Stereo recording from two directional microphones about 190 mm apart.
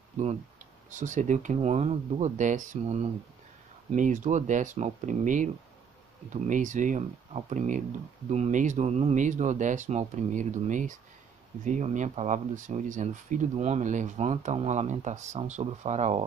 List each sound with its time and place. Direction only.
0.2 s speech: 40° right (ahead or behind)